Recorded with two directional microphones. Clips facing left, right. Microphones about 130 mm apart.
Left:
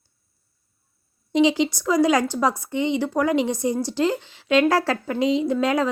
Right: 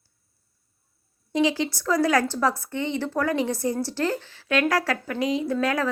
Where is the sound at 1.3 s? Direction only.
20° left (ahead or behind).